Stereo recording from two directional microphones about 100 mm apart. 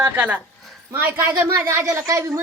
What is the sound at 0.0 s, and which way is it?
Speech, 20° right (ahead or behind).